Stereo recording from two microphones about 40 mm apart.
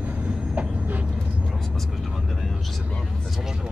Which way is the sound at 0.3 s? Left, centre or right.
Right.